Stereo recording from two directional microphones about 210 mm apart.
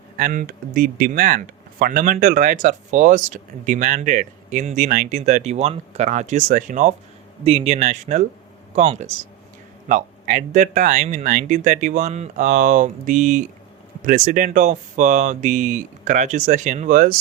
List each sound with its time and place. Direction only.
0.2 s speech: 40° right (ahead or behind)